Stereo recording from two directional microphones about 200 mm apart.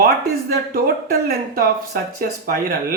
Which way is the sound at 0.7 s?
50° right (ahead or behind).